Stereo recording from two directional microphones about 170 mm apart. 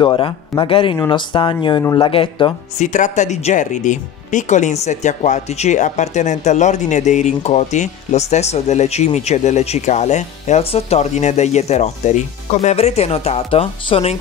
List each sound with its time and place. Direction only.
0.0 s speech: 30° left (ahead or behind)
2.8 s speech: 45° left (ahead or behind)